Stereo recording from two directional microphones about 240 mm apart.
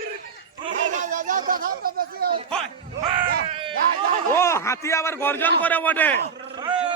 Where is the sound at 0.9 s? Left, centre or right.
Right.